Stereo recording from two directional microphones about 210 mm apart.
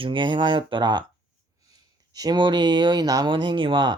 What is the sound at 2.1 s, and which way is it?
Speech, 20° right (ahead or behind).